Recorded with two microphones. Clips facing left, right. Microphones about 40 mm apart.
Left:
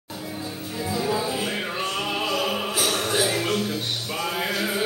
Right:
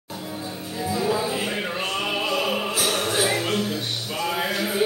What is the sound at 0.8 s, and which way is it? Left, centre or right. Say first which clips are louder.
Music: right 2 dB; centre.